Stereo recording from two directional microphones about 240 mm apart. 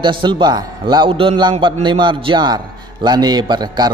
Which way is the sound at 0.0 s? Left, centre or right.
Centre.